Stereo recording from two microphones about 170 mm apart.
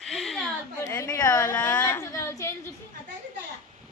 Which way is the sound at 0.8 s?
15° left (ahead or behind).